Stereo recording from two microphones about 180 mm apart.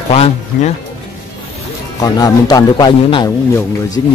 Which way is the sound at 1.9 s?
20° left (ahead or behind).